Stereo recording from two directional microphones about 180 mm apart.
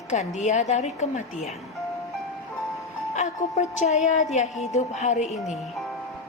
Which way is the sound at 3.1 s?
40° left (ahead or behind).